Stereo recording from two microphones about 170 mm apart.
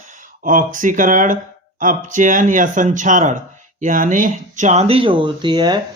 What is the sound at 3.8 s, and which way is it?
Speech, 50° right (ahead or behind).